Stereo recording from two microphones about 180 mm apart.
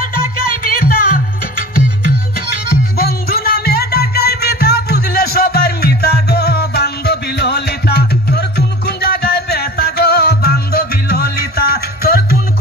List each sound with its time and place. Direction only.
0.7 s music: 55° left (ahead or behind)
3.0 s music: 55° left (ahead or behind)